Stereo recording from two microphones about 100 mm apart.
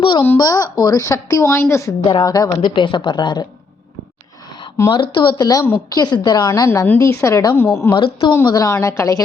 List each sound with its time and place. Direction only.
0.3 s a woman's voice: 40° left (ahead or behind)
2.0 s a woman's voice: 45° left (ahead or behind)
2.6 s a woman's voice: 55° left (ahead or behind)
4.9 s a woman's voice: 50° left (ahead or behind); by 7.9 s 25° left (ahead or behind)
7.9 s a woman's voice: 60° left (ahead or behind)
8.4 s a woman's voice: 35° left (ahead or behind)